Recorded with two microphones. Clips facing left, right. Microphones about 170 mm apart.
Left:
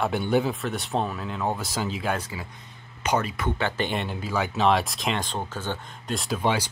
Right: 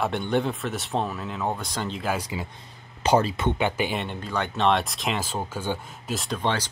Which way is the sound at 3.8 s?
Centre (ahead or behind).